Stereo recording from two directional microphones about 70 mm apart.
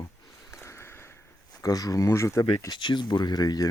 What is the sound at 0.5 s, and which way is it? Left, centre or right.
Sniff, left.